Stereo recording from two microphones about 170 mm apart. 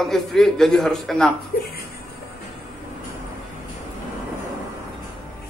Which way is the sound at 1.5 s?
60° left (ahead or behind).